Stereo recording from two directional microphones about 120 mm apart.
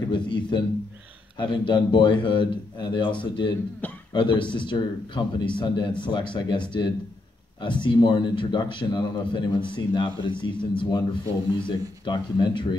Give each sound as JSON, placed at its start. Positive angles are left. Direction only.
{"t": 0.1, "sound": "a man's voice", "side_deg": 40}